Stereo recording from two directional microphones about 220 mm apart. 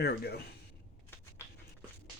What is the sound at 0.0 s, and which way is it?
Speech, 45° left (ahead or behind).